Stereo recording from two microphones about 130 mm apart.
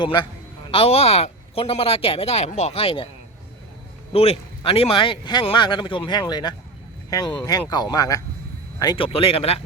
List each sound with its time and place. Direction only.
0.0 s a man's voice: 35° left (ahead or behind)
0.7 s speech: 45° left (ahead or behind)
4.1 s a man's voice: 50° left (ahead or behind); by 9.0 s 35° left (ahead or behind)
9.0 s speech: 45° left (ahead or behind)